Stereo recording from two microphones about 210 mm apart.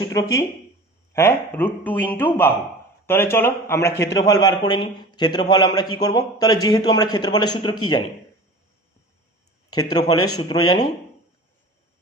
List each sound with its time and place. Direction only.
0.0 s a man's voice: 20° left (ahead or behind)
9.9 s a man's voice: 20° left (ahead or behind)